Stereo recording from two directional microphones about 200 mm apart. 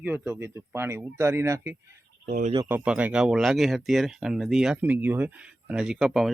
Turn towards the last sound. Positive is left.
turn(degrees=0)  # may be behind; listen again after turning